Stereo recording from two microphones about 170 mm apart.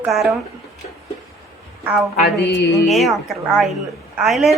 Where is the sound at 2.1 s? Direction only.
80° left.